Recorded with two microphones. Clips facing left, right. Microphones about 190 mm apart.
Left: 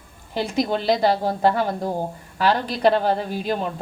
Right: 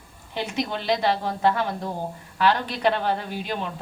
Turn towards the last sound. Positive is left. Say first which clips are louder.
# left 5 dB
turn(degrees=40)  # may be behind; listen again after turning